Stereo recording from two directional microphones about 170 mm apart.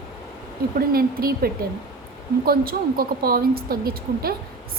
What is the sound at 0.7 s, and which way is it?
Speech, 60° right (ahead or behind).